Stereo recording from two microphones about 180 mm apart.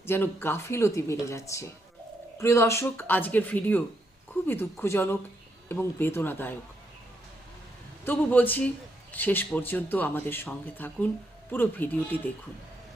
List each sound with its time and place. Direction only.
0.0 s speech: 10° left (ahead or behind)
8.0 s speech: 10° left (ahead or behind)